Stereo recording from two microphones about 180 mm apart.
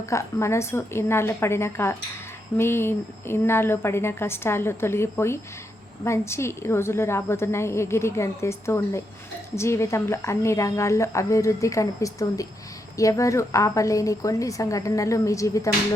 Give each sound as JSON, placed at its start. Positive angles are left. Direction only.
{"t": 0.0, "sound": "speech", "side_deg": 15}